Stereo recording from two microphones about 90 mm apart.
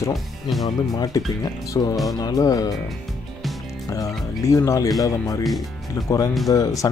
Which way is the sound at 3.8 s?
35° left (ahead or behind).